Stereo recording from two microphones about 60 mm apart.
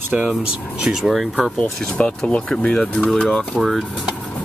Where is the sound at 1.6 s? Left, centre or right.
Centre.